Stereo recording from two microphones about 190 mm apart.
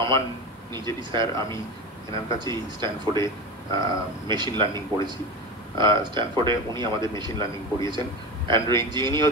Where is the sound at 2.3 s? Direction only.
25° right (ahead or behind).